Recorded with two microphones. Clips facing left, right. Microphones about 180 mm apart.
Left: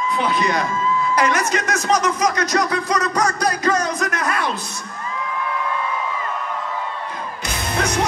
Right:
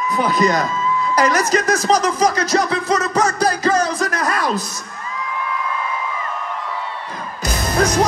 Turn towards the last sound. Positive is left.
turn(degrees=-40)  # may be behind; listen again after turning